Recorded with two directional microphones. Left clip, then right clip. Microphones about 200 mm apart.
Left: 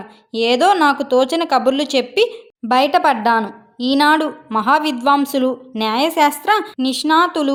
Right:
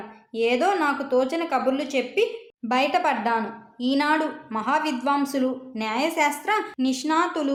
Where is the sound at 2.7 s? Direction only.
35° left (ahead or behind).